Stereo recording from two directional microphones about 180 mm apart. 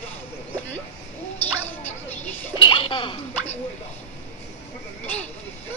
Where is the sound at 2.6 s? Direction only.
25° left (ahead or behind).